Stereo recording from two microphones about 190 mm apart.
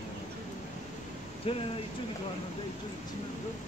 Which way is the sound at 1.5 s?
30° left (ahead or behind).